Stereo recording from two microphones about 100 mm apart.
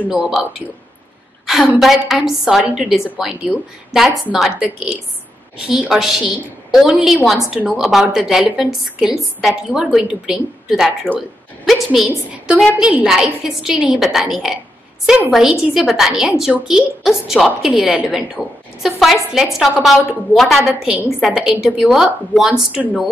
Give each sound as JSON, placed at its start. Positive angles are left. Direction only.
{"t": 0.1, "sound": "a woman's voice", "side_deg": -5}
{"t": 1.4, "sound": "a sound", "side_deg": 0}
{"t": 1.8, "sound": "a woman's voice", "side_deg": 0}